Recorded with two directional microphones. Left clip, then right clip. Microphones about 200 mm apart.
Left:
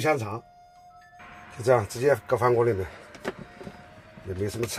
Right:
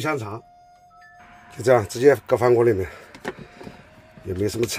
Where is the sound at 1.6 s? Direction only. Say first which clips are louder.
Right 6 dB; 40° right (ahead or behind).